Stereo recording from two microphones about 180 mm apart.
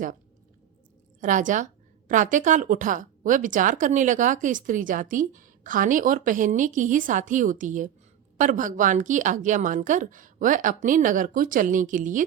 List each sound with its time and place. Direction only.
1.2 s a woman's voice: 45° right (ahead or behind)